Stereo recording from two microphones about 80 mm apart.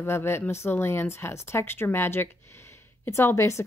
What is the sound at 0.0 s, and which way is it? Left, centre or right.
A woman's voice, left.